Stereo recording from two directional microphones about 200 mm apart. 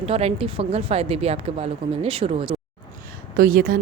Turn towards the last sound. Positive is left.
turn(degrees=-45)  # may be behind; listen again after turning